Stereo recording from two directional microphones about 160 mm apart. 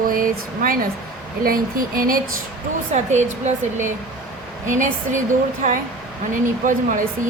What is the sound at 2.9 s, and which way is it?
Speech, 45° right (ahead or behind).